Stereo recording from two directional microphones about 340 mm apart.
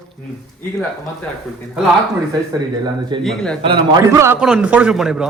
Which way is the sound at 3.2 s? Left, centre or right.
Centre.